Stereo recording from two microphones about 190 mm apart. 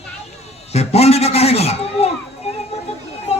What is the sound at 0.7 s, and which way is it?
A man's voice, 35° left (ahead or behind).